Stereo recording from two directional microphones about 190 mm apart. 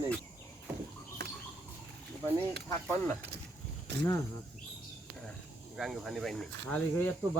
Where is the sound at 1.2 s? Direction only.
60° right (ahead or behind).